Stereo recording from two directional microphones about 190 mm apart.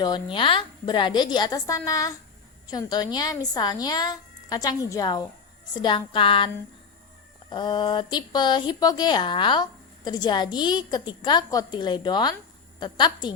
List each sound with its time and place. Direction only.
0.0 s speech: 25° left (ahead or behind)
7.5 s speech: 20° left (ahead or behind)